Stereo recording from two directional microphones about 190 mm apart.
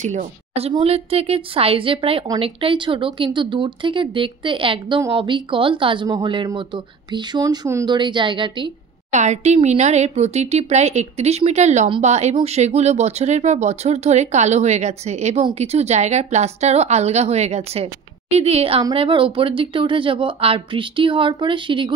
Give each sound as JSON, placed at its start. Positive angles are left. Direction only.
{"t": 0.0, "sound": "speech", "side_deg": -40}
{"t": 9.1, "sound": "speech", "side_deg": -40}